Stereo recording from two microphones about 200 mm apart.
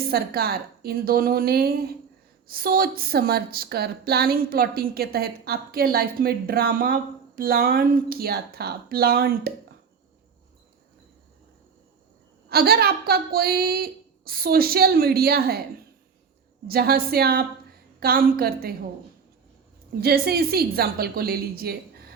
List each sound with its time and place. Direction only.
0.1 s a woman's voice: 50° right (ahead or behind)
12.5 s a woman's voice: 50° right (ahead or behind)
16.6 s a woman's voice: 50° right (ahead or behind)
20.0 s a woman's voice: 50° right (ahead or behind)